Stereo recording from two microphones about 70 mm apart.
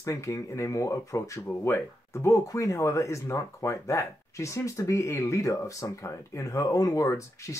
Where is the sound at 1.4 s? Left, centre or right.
Left.